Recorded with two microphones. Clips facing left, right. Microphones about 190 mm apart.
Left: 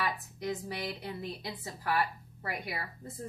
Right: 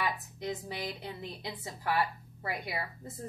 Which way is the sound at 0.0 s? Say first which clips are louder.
Even; 20° right (ahead or behind).